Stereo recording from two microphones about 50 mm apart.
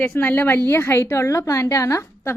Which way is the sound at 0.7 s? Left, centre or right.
Left.